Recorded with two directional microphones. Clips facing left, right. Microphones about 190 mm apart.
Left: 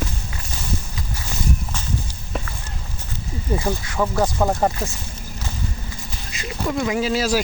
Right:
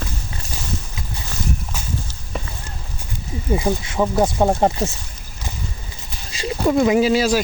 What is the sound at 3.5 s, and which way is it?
Speech, 20° right (ahead or behind).